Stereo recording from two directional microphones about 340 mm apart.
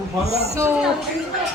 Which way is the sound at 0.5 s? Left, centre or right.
Centre.